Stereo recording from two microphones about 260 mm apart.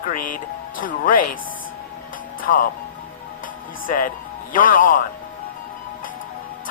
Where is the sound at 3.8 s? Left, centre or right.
Left.